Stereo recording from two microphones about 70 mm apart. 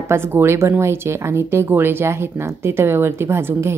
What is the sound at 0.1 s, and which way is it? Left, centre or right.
A woman's voice, right.